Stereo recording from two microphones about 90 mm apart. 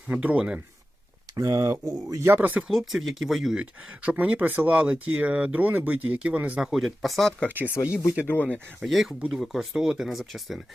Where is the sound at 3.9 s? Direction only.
15° right (ahead or behind).